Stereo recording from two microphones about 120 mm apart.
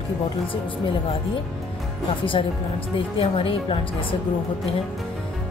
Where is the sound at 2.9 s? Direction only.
50° left (ahead or behind).